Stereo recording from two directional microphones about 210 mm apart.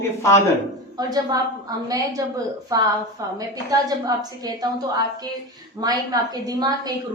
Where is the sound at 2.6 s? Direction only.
20° right (ahead or behind).